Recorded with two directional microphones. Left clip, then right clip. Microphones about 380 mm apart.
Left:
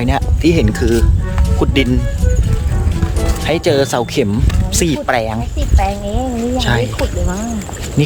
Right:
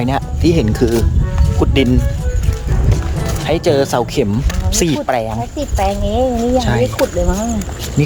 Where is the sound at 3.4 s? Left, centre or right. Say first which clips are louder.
Even; centre.